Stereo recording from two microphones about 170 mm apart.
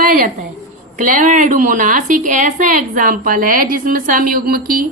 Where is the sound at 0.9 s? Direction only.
50° right (ahead or behind).